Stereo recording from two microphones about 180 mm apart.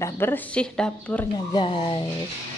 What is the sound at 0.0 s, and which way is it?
Speech, 10° left (ahead or behind).